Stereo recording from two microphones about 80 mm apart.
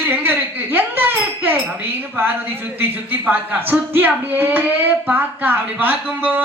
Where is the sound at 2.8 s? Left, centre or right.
Right.